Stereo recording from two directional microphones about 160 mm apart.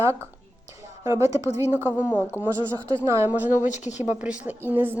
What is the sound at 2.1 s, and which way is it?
Speech, 10° left (ahead or behind).